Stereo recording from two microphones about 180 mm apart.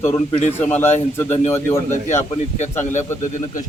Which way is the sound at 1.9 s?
40° left (ahead or behind).